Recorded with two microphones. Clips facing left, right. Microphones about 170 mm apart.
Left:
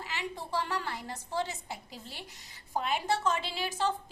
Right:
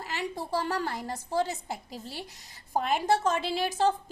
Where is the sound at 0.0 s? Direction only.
40° right (ahead or behind).